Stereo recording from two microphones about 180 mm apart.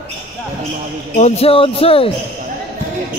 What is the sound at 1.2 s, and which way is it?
Speech, 35° left (ahead or behind).